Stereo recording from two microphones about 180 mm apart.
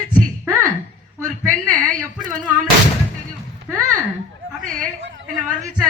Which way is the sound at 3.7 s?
45° right (ahead or behind).